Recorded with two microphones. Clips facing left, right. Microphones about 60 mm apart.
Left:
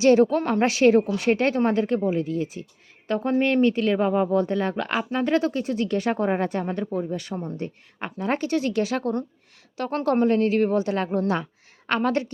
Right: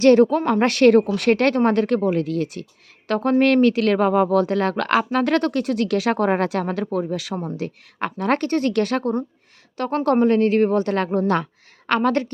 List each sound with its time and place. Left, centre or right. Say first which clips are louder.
0.0 s speech: right 3 dB; right
0.6 s speech: right 3 dB; right
3.4 s speech: right 4 dB; right
3.9 s a woman's voice: right 4 dB; right
8.0 s speech: right 5 dB; right